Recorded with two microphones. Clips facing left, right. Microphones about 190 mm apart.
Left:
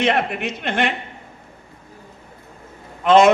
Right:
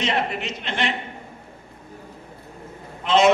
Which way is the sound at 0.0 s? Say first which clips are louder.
Left 5 dB; 60° left (ahead or behind).